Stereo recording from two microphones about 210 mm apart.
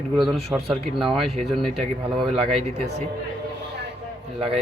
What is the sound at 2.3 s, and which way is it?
Speech, 25° right (ahead or behind).